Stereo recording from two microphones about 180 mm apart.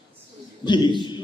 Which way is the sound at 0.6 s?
25° left (ahead or behind).